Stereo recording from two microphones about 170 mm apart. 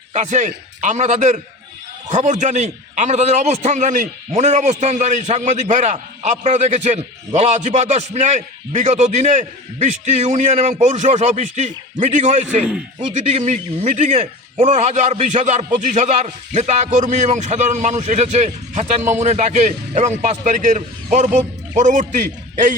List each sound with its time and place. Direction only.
0.1 s a man's voice: 45° right (ahead or behind)